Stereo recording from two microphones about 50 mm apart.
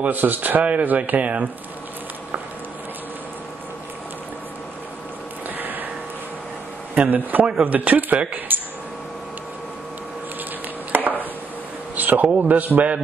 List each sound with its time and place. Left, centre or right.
0.0 s speech: right
5.6 s a sound: right
7.1 s speech: right
10.9 s chopping: right
11.9 s a sound: right
12.4 s speech: right